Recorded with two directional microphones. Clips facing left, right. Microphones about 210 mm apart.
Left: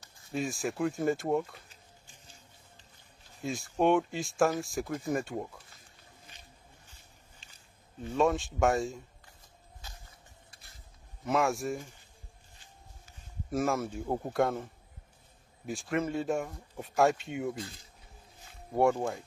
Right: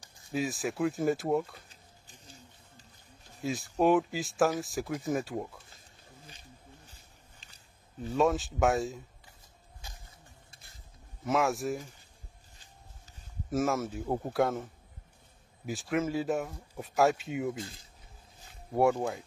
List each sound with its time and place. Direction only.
0.3 s speech: centre (ahead or behind)
1.7 s a sound: 35° right (ahead or behind)
3.3 s speech: centre (ahead or behind)
8.0 s speech: centre (ahead or behind)
11.2 s speech: centre (ahead or behind)
13.5 s speech: centre (ahead or behind)
18.7 s speech: centre (ahead or behind)